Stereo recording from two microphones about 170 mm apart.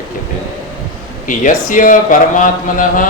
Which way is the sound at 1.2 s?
50° left (ahead or behind).